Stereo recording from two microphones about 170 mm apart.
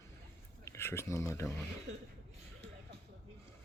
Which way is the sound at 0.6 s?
15° left (ahead or behind).